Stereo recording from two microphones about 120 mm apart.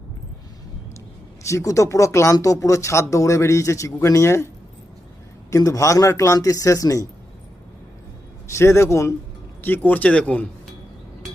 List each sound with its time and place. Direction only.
1.5 s speech: 25° left (ahead or behind)
5.5 s speech: 30° left (ahead or behind)
8.5 s speech: 25° left (ahead or behind)